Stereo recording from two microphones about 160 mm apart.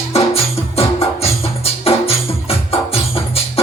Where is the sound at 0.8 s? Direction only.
40° left (ahead or behind).